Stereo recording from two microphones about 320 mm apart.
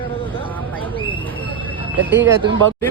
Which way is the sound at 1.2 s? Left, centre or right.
Centre.